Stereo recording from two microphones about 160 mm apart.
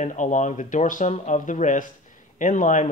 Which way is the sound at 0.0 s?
50° left (ahead or behind).